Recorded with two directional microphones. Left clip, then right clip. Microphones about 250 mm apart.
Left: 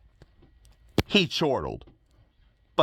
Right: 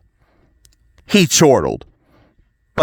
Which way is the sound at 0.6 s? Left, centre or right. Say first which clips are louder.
Left 3 dB; right.